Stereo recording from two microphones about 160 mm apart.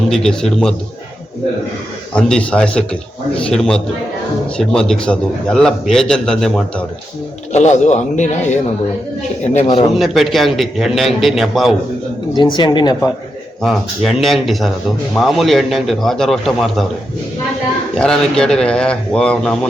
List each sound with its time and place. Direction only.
0.1 s a man's voice: 5° left (ahead or behind)
2.1 s a man's voice: 5° left (ahead or behind)
7.5 s a man's voice: 45° left (ahead or behind)
9.9 s a man's voice: centre (ahead or behind)
12.3 s speech: 30° left (ahead or behind)
13.6 s a man's voice: centre (ahead or behind)
17.9 s a man's voice: 5° left (ahead or behind)